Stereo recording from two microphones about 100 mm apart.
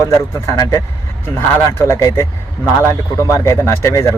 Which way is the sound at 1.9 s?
30° left (ahead or behind).